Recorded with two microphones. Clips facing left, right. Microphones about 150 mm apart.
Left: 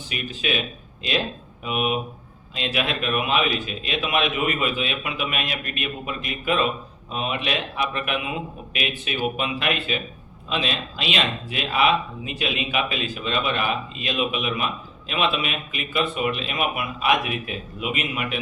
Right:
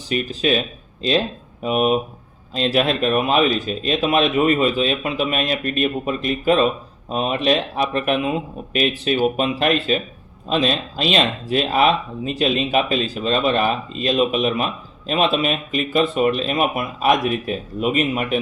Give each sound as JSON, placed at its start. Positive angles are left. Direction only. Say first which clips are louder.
{"t": 0.1, "sound": "speech", "louder": "right 8 dB", "side_deg": -35}
{"t": 1.6, "sound": "speech", "louder": "right 7 dB", "side_deg": -40}